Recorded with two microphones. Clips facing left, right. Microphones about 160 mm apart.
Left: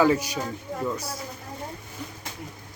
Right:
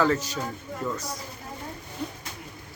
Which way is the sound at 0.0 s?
10° left (ahead or behind).